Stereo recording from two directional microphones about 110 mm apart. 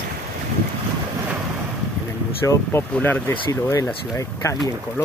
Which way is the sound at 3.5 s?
30° left (ahead or behind).